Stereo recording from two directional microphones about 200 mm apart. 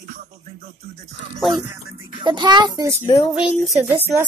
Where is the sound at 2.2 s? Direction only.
20° right (ahead or behind).